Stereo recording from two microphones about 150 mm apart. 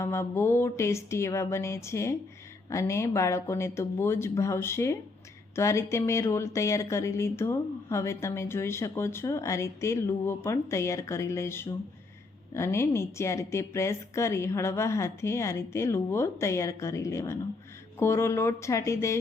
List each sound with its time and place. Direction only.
0.0 s a woman's voice: 15° left (ahead or behind)